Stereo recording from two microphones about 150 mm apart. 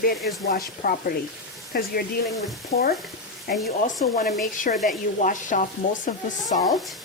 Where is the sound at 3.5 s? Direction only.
90° left.